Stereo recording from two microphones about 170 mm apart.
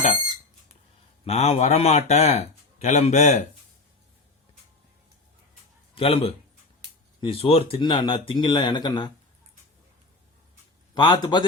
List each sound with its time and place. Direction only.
1.2 s speech: 40° left (ahead or behind)
5.9 s a man's voice: 35° left (ahead or behind)
10.9 s speech: 30° left (ahead or behind)